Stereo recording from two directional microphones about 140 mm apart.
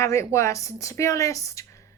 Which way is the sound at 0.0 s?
20° left (ahead or behind).